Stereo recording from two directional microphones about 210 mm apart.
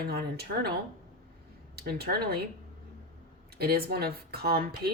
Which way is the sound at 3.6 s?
50° right (ahead or behind).